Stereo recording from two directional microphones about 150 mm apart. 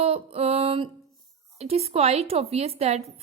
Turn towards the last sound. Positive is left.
turn(degrees=-45)  # may be behind; listen again after turning